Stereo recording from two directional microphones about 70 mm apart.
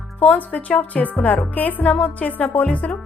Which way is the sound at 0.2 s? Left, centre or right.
Left.